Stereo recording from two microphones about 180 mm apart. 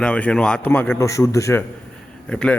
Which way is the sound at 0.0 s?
5° left (ahead or behind).